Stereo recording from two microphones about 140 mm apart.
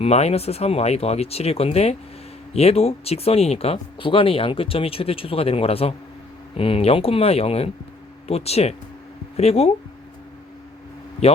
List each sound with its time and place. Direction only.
0.0 s speech: 50° left (ahead or behind)